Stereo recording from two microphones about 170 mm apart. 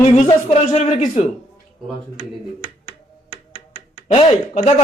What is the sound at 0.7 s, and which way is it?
Speech, 40° left (ahead or behind).